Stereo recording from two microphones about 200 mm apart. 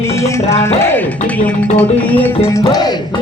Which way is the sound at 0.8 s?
10° left (ahead or behind).